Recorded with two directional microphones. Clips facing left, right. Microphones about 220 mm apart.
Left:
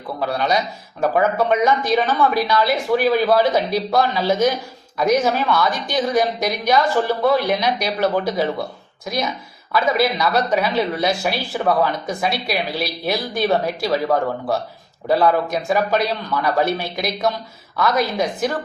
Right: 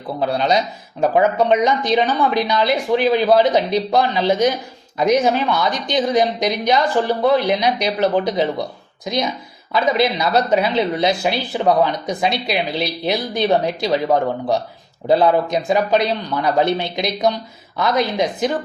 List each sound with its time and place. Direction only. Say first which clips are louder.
0.2 s speech: right 3 dB; 25° right (ahead or behind)